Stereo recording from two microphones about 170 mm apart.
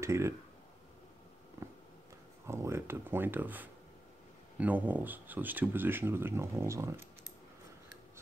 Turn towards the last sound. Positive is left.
turn(degrees=-15)  # may be behind; listen again after turning